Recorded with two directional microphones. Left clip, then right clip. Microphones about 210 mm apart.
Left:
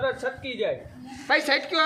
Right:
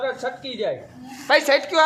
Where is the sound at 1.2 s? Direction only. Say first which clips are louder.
Right 5 dB; 20° left (ahead or behind).